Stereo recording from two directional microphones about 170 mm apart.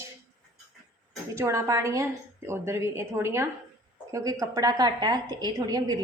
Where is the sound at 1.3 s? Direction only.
15° right (ahead or behind).